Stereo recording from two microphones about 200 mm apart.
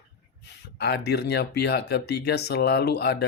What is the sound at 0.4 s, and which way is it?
Speech, 55° left (ahead or behind).